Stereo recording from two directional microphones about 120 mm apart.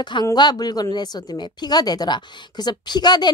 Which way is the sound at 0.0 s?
35° left (ahead or behind).